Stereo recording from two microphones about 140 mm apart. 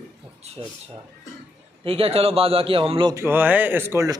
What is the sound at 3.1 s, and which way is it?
Speech, 15° right (ahead or behind).